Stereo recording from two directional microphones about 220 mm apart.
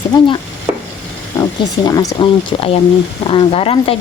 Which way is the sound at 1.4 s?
15° left (ahead or behind).